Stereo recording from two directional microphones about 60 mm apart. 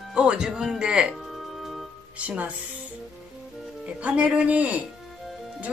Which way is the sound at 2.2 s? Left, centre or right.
Right.